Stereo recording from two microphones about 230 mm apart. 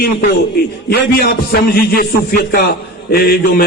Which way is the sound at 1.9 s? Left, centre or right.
Left.